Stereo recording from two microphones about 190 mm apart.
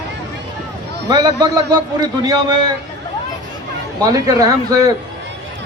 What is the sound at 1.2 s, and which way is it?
A man's voice, 20° right (ahead or behind).